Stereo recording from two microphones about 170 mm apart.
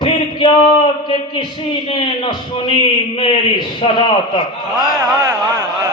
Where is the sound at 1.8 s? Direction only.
30° left (ahead or behind).